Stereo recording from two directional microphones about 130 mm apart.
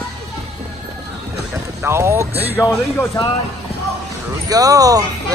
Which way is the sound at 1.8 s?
20° right (ahead or behind).